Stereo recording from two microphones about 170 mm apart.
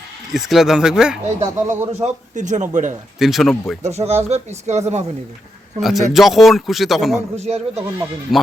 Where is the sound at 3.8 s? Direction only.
40° right (ahead or behind).